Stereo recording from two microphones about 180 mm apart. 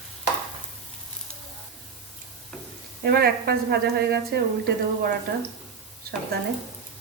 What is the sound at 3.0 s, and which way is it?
A woman's voice, 60° right (ahead or behind).